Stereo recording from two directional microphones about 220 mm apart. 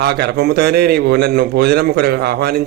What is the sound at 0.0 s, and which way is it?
A man's voice, 50° right (ahead or behind).